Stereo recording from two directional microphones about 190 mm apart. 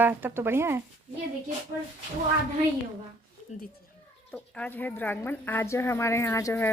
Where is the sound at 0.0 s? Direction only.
10° right (ahead or behind).